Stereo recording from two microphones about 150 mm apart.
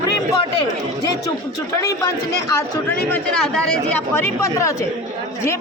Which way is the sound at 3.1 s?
5° left (ahead or behind).